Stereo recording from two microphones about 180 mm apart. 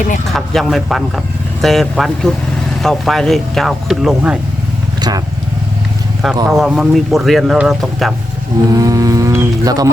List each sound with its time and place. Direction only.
0.3 s speech: centre (ahead or behind)
4.9 s vehicle: 20° right (ahead or behind)
6.3 s speech: 20° right (ahead or behind)
6.6 s speech: 5° right (ahead or behind)
8.7 s speech: 20° right (ahead or behind)